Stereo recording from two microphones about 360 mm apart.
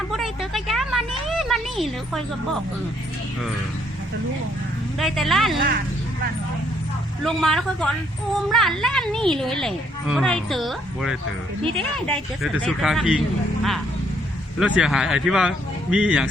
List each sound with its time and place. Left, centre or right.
0.1 s a sound: centre
4.9 s a woman's voice: centre
7.3 s a woman's voice: centre
14.6 s a woman's voice: centre